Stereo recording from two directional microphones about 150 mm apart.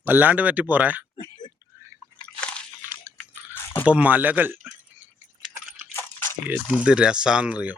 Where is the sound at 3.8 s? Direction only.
10° right (ahead or behind).